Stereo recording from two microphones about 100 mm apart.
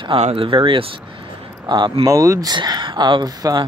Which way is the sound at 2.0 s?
30° right (ahead or behind).